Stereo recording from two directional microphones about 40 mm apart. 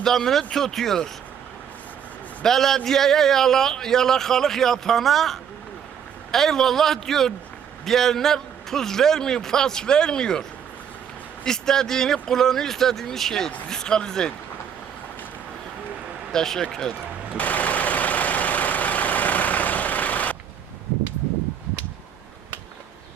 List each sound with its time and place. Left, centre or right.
0.3 s a man's voice: centre
2.4 s a man's voice: centre
11.4 s a man's voice: centre
16.3 s a man's voice: centre
17.3 s vehicle: left